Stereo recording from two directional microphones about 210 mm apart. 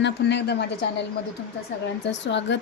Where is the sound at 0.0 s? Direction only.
55° left (ahead or behind).